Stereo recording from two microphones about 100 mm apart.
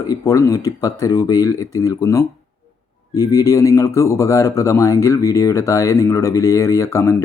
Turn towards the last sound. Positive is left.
turn(degrees=30)  # may be behind; listen again after turning